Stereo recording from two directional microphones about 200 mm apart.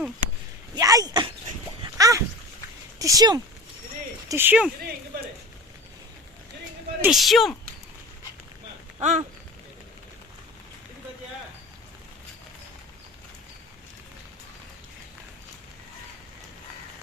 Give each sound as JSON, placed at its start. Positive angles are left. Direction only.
{"t": 0.7, "sound": "speech", "side_deg": -15}
{"t": 1.8, "sound": "splash", "side_deg": -15}
{"t": 3.0, "sound": "speech", "side_deg": -15}
{"t": 7.0, "sound": "speech", "side_deg": 0}
{"t": 9.0, "sound": "a sound", "side_deg": -35}